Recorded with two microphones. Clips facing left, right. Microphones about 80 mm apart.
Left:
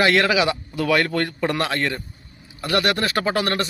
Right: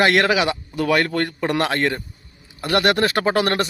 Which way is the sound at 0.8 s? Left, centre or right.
Right.